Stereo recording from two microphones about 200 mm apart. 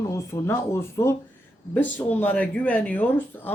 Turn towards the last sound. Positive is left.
turn(degrees=10)  # may be behind; listen again after turning